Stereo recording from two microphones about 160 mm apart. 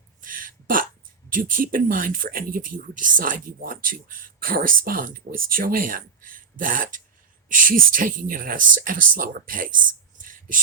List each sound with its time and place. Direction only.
0.2 s throat clearing: 60° right (ahead or behind)
1.3 s speech: 60° right (ahead or behind)